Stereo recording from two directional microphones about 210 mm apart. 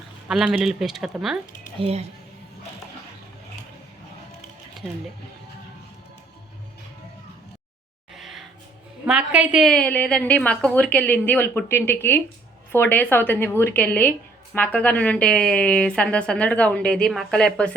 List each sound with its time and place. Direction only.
0.3 s speech: 5° right (ahead or behind)
1.8 s speech: 30° right (ahead or behind)
8.1 s music: centre (ahead or behind)
9.0 s a woman's voice: 5° right (ahead or behind)